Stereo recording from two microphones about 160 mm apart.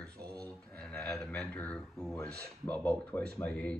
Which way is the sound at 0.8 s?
5° left (ahead or behind).